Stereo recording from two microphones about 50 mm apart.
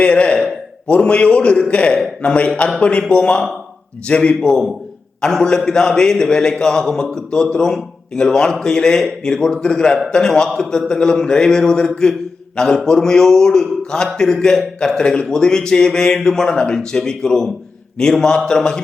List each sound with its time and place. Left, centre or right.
0.0 s a man's voice: left